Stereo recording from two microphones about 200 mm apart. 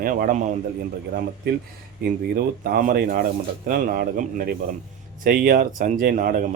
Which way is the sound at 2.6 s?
45° right (ahead or behind).